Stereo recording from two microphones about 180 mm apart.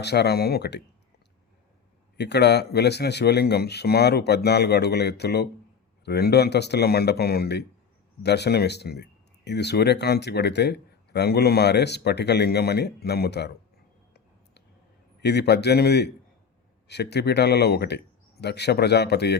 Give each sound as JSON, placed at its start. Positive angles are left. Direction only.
{"t": 0.0, "sound": "speech", "side_deg": 65}
{"t": 2.1, "sound": "speech", "side_deg": 70}
{"t": 15.2, "sound": "a man's voice", "side_deg": 65}